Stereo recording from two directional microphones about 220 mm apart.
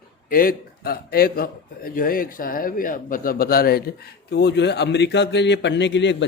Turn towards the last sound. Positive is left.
turn(degrees=55)  # may be behind; listen again after turning